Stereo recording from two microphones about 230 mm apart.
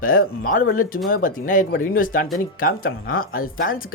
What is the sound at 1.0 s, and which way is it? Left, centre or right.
Speech, left.